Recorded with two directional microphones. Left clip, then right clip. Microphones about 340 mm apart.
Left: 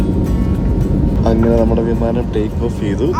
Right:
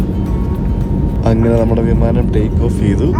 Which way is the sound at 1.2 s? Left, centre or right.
Right.